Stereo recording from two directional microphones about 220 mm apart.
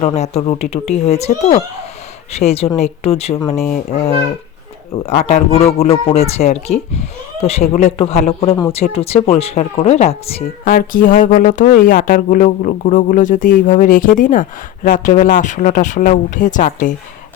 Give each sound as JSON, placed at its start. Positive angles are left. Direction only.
{"t": 0.0, "sound": "speech", "side_deg": 30}